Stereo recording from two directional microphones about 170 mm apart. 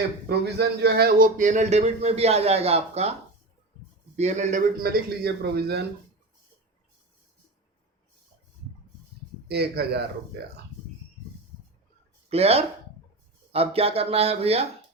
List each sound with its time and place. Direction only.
0.3 s a man's voice: 70° right (ahead or behind)
1.4 s a man's voice: 45° right (ahead or behind)
4.2 s a man's voice: 40° right (ahead or behind)
4.8 s a man's voice: 65° right (ahead or behind)
9.5 s a man's voice: 70° right (ahead or behind)
12.3 s a man's voice: 35° right (ahead or behind)